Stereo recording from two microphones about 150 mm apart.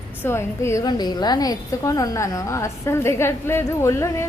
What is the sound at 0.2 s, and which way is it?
A woman's voice, 15° left (ahead or behind).